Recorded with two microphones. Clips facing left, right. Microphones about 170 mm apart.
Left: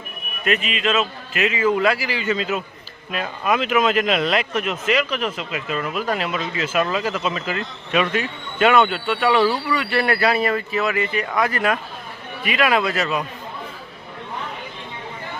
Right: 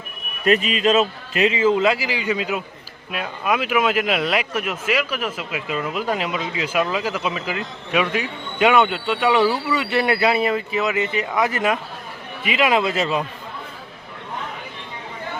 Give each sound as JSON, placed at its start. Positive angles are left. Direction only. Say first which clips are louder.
{"t": 0.4, "sound": "a man's voice", "louder": "right 4 dB", "side_deg": -35}